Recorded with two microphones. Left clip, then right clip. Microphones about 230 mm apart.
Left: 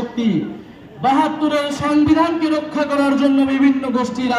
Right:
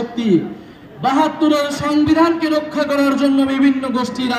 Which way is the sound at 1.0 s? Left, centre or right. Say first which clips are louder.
Right 1 dB; right.